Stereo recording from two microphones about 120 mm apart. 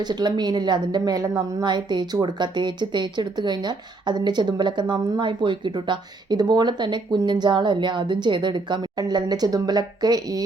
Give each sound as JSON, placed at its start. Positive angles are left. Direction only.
{"t": 0.0, "sound": "speech", "side_deg": -35}